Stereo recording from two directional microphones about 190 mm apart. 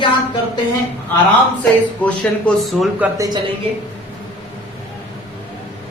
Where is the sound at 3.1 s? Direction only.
20° right (ahead or behind).